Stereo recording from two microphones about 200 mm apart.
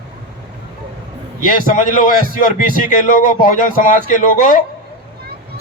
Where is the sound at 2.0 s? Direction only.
40° left (ahead or behind).